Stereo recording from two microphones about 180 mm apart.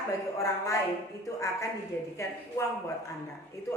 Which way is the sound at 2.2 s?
15° left (ahead or behind).